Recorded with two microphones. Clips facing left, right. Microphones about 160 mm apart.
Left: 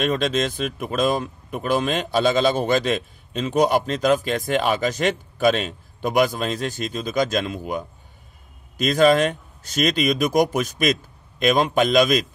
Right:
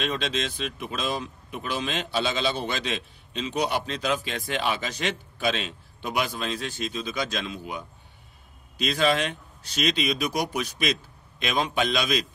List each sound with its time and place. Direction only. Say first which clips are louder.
0.0 s speech: left 7 dB; 45° left (ahead or behind)